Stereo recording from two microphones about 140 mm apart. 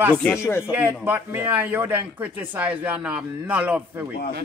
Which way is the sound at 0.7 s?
15° right (ahead or behind).